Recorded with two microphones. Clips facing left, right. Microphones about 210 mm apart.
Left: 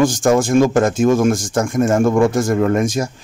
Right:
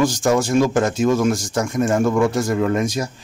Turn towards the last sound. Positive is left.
turn(degrees=50)  # may be behind; listen again after turning